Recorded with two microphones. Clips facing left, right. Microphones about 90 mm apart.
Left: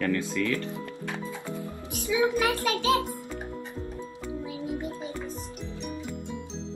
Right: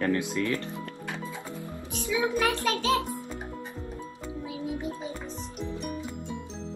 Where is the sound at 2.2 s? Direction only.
10° left (ahead or behind).